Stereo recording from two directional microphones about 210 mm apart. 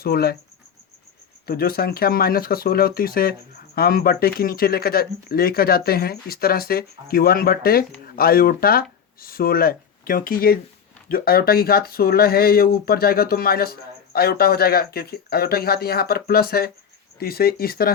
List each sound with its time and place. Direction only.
0.0 s speech: 45° left (ahead or behind)
1.5 s speech: 45° left (ahead or behind)